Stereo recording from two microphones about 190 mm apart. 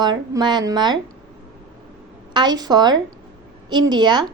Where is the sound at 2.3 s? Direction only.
20° right (ahead or behind).